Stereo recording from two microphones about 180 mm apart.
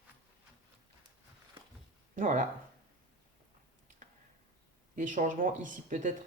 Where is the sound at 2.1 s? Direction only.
45° right (ahead or behind).